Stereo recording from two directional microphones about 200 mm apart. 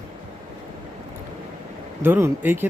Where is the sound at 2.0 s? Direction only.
10° right (ahead or behind).